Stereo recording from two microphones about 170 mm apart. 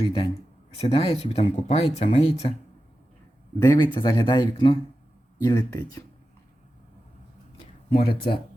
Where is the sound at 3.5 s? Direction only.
25° left (ahead or behind).